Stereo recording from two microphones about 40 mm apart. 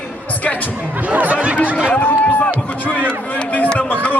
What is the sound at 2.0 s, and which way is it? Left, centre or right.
Run, left.